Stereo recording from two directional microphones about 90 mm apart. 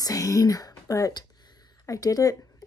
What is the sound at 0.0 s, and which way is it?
Speech, 40° left (ahead or behind).